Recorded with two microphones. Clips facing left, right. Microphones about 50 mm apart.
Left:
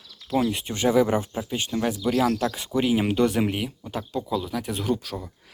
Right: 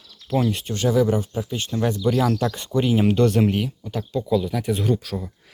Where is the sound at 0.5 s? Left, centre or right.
Centre.